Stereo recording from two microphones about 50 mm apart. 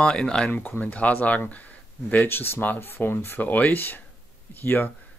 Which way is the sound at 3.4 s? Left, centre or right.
Left.